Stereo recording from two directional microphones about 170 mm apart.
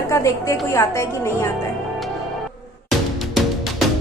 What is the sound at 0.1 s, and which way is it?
A woman's voice, 15° left (ahead or behind).